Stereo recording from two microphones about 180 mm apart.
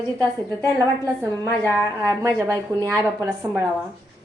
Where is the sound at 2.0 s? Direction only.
15° right (ahead or behind).